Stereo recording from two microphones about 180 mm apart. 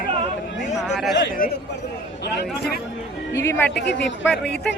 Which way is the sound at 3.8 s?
70° left (ahead or behind).